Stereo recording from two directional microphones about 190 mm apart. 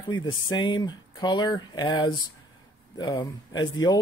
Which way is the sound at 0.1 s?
25° left (ahead or behind).